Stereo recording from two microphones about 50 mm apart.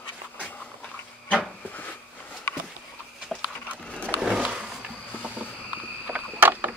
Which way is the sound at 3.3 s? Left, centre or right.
Centre.